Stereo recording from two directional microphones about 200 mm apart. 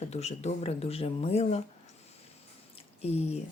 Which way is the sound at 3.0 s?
30° left (ahead or behind).